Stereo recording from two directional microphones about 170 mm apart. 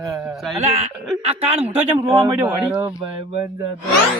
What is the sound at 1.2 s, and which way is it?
Speech, 35° right (ahead or behind).